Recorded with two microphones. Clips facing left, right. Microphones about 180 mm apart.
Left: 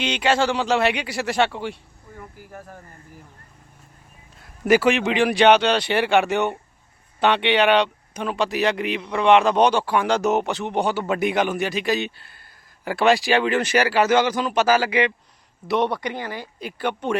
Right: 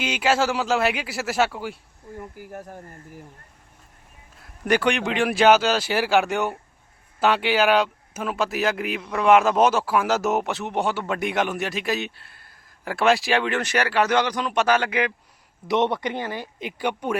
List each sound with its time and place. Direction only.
0.0 s speech: 5° right (ahead or behind)
2.4 s speech: 20° right (ahead or behind)
4.4 s speech: 5° left (ahead or behind)
15.6 s speech: 20° right (ahead or behind)